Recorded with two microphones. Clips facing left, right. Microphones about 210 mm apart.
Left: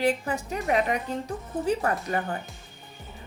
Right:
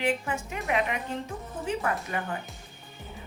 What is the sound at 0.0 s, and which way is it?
A woman's voice, 40° left (ahead or behind).